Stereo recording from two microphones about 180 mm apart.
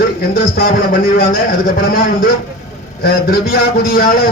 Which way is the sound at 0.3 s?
55° left (ahead or behind).